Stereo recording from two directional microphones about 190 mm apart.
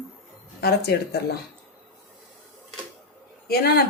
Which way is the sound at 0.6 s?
60° left (ahead or behind).